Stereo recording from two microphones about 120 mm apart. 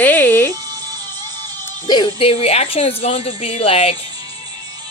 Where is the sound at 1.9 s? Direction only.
40° left (ahead or behind); by 3.9 s 55° left (ahead or behind).